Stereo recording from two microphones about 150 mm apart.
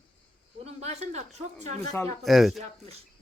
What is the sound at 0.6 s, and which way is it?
Speech, 45° right (ahead or behind).